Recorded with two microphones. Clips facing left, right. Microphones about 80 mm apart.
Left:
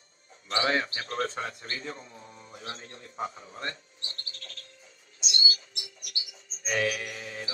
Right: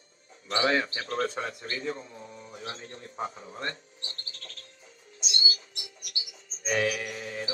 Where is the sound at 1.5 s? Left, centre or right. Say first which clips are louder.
Right 2 dB; left.